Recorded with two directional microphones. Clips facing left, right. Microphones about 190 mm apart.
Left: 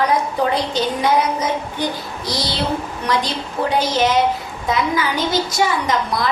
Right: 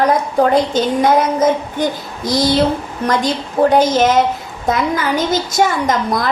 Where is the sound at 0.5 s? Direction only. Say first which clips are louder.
Right 6 dB; 50° right (ahead or behind).